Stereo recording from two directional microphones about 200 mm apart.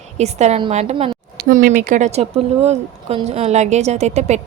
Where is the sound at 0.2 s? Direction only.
35° right (ahead or behind).